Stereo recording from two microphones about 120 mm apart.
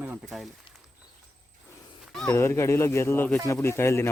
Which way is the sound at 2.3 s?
20° left (ahead or behind).